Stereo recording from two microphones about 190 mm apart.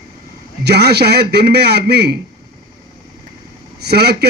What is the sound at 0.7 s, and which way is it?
A man's voice, 60° right (ahead or behind).